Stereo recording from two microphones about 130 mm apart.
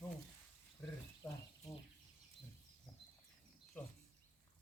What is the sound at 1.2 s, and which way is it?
Frying, 10° left (ahead or behind).